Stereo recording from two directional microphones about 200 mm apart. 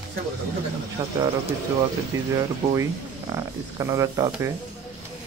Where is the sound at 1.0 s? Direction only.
25° right (ahead or behind).